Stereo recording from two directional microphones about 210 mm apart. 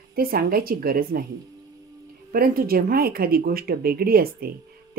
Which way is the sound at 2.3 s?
45° right (ahead or behind).